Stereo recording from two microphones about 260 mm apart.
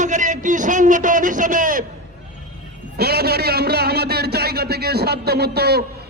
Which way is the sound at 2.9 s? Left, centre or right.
Right.